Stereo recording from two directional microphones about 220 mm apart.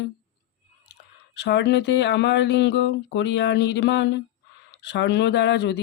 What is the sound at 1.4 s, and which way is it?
Speech, 50° left (ahead or behind).